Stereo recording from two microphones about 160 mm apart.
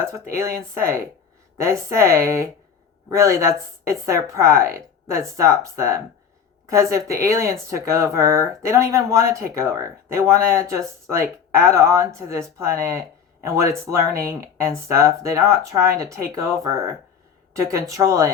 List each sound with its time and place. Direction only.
0.0 s speech: 15° right (ahead or behind)